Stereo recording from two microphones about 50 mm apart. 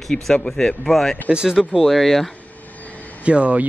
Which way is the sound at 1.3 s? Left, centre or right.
Centre.